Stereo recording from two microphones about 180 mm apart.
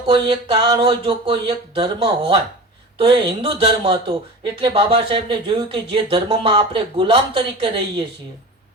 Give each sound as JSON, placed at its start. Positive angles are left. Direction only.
{"t": 0.1, "sound": "speech", "side_deg": -30}